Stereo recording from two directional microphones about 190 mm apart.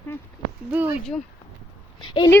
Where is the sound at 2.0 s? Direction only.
25° left (ahead or behind).